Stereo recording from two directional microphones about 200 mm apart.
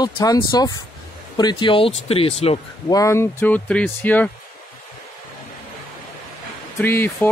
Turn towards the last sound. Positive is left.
turn(degrees=10)  # may be behind; listen again after turning